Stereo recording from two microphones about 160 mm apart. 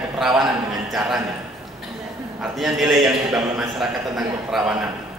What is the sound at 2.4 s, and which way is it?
A man's voice, centre (ahead or behind).